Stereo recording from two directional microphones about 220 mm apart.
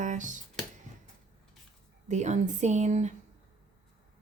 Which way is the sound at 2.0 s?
30° right (ahead or behind).